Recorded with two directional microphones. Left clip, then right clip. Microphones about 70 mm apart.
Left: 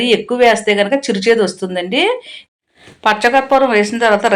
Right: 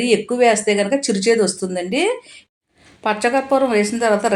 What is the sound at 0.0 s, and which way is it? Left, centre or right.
A woman's voice, right.